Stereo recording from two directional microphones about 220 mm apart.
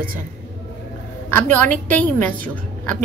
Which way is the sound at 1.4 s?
35° right (ahead or behind).